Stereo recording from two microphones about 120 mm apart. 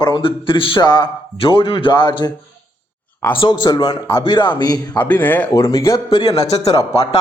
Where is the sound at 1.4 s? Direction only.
50° left (ahead or behind).